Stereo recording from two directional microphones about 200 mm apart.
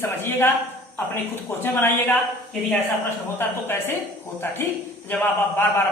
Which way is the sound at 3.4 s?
10° left (ahead or behind).